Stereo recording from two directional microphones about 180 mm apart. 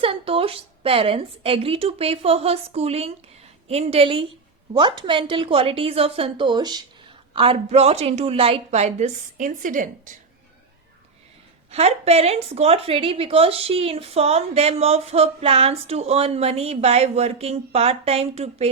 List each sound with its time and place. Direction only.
0.0 s a woman's voice: 30° right (ahead or behind); by 10.2 s 45° right (ahead or behind)
11.7 s a woman's voice: 35° right (ahead or behind)